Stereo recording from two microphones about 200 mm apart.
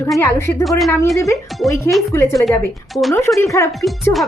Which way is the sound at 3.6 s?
15° left (ahead or behind).